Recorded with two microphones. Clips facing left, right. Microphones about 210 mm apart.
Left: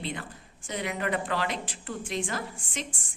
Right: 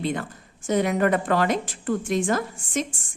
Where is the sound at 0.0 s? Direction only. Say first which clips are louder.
Right 9 dB; 50° right (ahead or behind).